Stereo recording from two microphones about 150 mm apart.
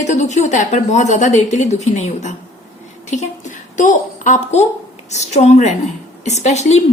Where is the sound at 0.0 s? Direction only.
50° left (ahead or behind).